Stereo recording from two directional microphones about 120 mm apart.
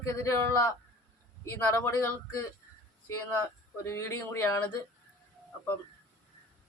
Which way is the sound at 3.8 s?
25° left (ahead or behind).